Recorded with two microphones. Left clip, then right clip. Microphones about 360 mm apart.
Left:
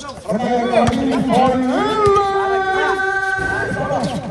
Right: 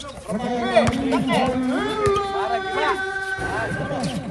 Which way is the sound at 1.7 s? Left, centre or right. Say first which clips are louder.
Left 6 dB; left.